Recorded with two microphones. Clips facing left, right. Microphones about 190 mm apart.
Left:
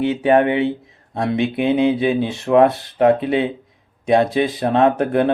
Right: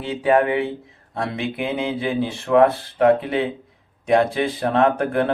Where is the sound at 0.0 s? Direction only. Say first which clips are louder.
Left 3 dB; 20° left (ahead or behind).